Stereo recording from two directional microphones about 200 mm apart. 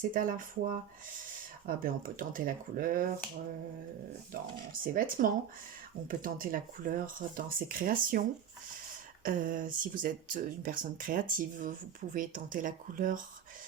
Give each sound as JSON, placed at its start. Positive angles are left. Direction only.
{"t": 0.1, "sound": "speech", "side_deg": -45}
{"t": 4.3, "sound": "speech", "side_deg": -45}
{"t": 9.2, "sound": "speech", "side_deg": -45}